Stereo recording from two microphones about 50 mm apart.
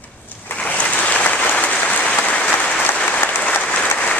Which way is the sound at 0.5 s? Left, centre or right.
Left.